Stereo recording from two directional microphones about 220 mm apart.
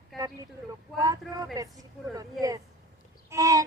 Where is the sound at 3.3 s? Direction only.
15° right (ahead or behind).